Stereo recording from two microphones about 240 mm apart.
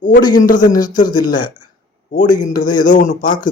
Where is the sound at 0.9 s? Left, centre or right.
Centre.